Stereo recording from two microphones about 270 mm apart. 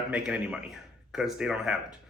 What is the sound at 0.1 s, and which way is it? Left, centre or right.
A woman's voice, centre.